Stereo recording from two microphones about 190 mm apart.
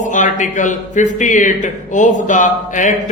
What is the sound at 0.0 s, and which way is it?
Speech, 40° left (ahead or behind).